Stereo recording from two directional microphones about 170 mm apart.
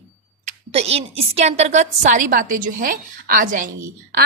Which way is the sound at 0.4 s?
35° right (ahead or behind).